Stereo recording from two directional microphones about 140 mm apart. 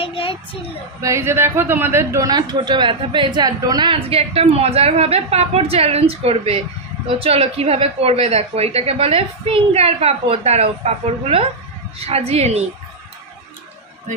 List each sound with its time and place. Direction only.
0.0 s a sound: 40° left (ahead or behind)
1.0 s speech: 20° right (ahead or behind)
4.2 s a woman's voice: 45° right (ahead or behind)